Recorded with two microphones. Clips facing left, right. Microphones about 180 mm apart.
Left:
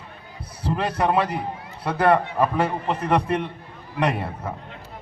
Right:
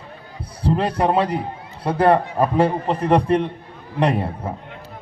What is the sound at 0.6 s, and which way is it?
A man's voice, 30° right (ahead or behind).